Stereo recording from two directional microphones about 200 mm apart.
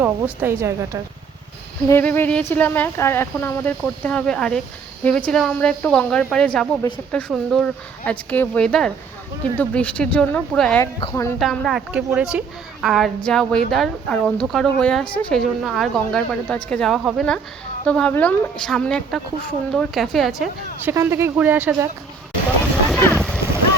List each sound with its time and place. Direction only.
0.0 s speech: 10° right (ahead or behind)
1.9 s speech: 10° left (ahead or behind)
11.1 s speech: 15° left (ahead or behind)
11.3 s speech: centre (ahead or behind)
20.9 s speech: 15° right (ahead or behind)
22.4 s vehicle: 5° left (ahead or behind)